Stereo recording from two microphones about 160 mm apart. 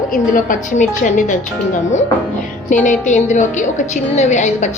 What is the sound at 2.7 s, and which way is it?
A woman's voice, 50° left (ahead or behind).